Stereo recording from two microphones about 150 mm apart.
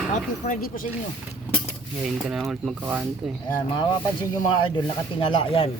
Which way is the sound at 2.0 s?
Centre (ahead or behind).